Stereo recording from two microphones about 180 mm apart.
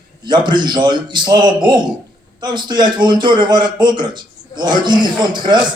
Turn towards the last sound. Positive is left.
turn(degrees=-25)  # may be behind; listen again after turning